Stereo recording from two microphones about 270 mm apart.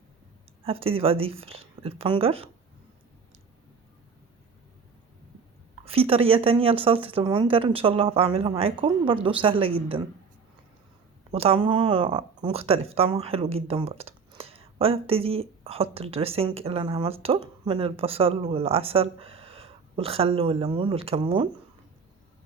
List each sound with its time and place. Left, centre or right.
0.6 s speech: right
5.8 s speech: right
11.3 s speech: right